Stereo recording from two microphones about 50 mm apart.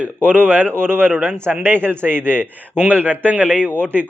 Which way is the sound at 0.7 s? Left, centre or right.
Right.